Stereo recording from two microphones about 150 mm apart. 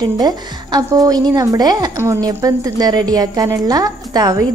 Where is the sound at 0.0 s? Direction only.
25° right (ahead or behind).